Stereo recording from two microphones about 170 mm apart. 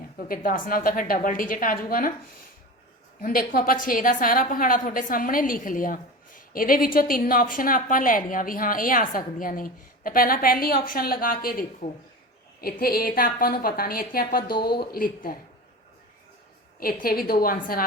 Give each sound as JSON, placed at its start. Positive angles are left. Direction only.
{"t": 0.2, "sound": "a woman's voice", "side_deg": 55}
{"t": 3.2, "sound": "a woman's voice", "side_deg": 55}
{"t": 16.8, "sound": "a woman's voice", "side_deg": 60}